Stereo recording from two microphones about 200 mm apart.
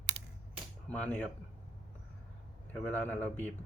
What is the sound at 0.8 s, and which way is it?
Speech, 5° left (ahead or behind).